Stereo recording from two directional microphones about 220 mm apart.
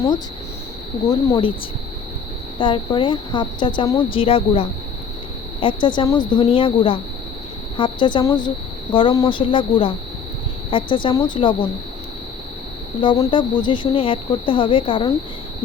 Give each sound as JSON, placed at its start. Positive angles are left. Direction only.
{"t": 1.3, "sound": "speech", "side_deg": 20}
{"t": 2.6, "sound": "speech", "side_deg": 20}
{"t": 13.0, "sound": "speech", "side_deg": 20}